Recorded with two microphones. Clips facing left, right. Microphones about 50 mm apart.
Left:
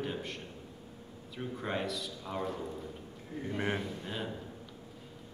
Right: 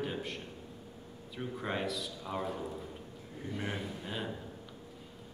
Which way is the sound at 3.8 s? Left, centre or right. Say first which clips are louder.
Left 1 dB; centre.